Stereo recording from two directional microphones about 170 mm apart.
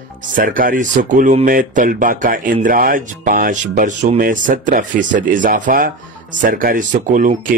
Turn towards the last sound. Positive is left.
turn(degrees=-50)  # may be behind; listen again after turning